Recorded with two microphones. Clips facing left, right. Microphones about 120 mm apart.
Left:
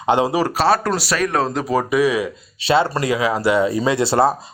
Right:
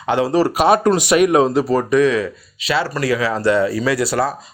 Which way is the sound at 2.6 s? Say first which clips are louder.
Left 3 dB; 25° left (ahead or behind).